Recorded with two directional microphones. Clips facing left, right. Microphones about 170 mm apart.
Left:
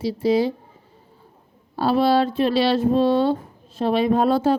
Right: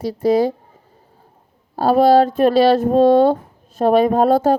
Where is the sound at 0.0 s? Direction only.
45° right (ahead or behind).